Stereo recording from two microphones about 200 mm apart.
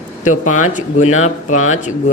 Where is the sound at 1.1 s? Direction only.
35° left (ahead or behind).